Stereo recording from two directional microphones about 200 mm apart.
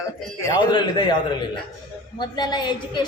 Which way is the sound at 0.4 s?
20° left (ahead or behind).